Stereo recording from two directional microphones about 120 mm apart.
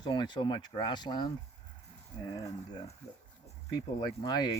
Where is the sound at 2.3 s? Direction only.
30° left (ahead or behind).